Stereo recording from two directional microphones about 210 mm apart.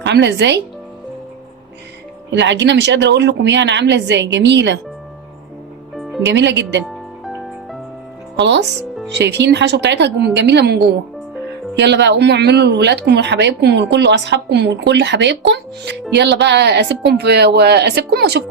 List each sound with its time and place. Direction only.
0.0 s speech: 55° right (ahead or behind)
2.3 s speech: 60° right (ahead or behind)
6.0 s music: centre (ahead or behind)
6.2 s speech: 55° right (ahead or behind)
6.8 s music: centre (ahead or behind)
8.4 s speech: 55° right (ahead or behind)
11.8 s speech: 55° right (ahead or behind)